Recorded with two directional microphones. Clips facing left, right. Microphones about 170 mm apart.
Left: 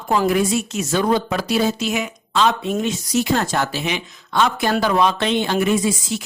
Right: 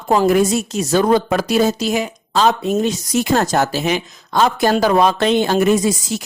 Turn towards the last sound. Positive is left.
turn(degrees=-40)  # may be behind; listen again after turning